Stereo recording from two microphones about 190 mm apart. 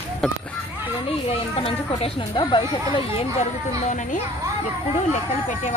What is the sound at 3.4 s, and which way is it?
Speech, 40° left (ahead or behind).